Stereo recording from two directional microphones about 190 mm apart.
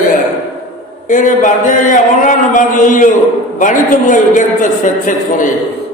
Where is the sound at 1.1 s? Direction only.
40° left (ahead or behind).